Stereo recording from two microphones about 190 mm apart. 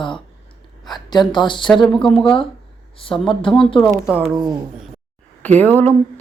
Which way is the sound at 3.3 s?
25° left (ahead or behind).